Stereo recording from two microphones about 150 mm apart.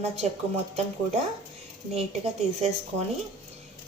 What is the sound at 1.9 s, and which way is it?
Speech, 45° right (ahead or behind).